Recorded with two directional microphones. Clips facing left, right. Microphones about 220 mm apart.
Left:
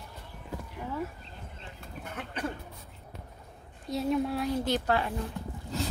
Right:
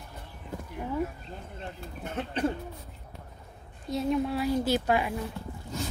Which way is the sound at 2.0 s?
25° right (ahead or behind).